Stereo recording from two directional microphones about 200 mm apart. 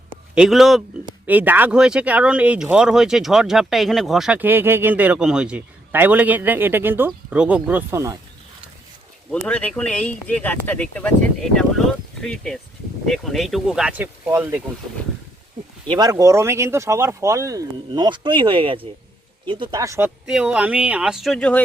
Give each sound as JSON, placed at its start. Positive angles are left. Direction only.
{"t": 0.3, "sound": "speech", "side_deg": 0}
{"t": 9.3, "sound": "speech", "side_deg": 5}
{"t": 12.2, "sound": "speech", "side_deg": 5}
{"t": 15.9, "sound": "speech", "side_deg": -20}
{"t": 20.2, "sound": "speech", "side_deg": -5}